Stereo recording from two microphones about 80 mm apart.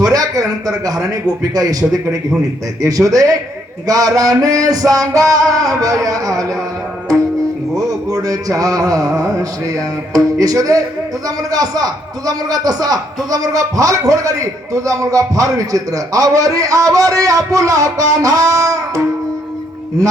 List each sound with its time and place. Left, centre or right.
0.1 s a man's voice: right
7.8 s a man's voice: right